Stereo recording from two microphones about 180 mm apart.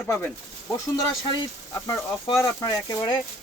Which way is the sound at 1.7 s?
20° left (ahead or behind).